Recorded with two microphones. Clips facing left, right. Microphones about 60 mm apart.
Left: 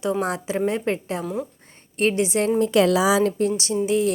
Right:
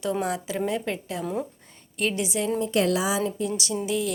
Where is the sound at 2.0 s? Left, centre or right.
Left.